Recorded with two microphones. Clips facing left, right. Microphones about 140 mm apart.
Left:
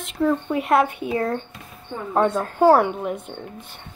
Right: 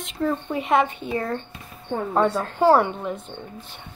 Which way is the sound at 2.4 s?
10° left (ahead or behind).